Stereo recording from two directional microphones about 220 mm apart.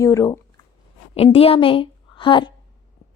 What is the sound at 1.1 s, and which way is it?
A woman's voice, 25° left (ahead or behind).